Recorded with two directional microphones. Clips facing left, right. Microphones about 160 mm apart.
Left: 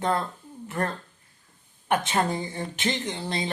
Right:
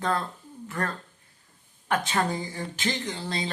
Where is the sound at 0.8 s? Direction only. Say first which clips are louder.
Left 3 dB; 25° left (ahead or behind).